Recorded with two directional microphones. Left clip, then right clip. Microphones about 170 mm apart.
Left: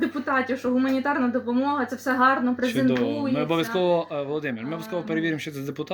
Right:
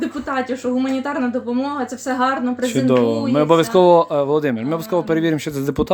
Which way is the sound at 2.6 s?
70° right (ahead or behind).